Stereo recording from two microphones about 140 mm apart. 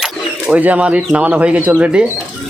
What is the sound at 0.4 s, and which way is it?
Speech, 10° right (ahead or behind).